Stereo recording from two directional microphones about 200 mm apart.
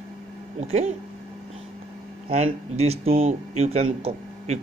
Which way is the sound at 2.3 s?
30° right (ahead or behind).